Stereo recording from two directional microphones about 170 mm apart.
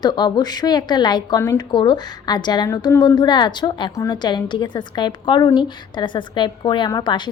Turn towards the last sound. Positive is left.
turn(degrees=25)  # may be behind; listen again after turning